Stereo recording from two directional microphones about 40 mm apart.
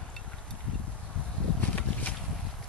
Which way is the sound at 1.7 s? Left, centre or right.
Left.